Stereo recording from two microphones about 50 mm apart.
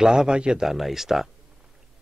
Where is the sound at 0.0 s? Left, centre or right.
Centre.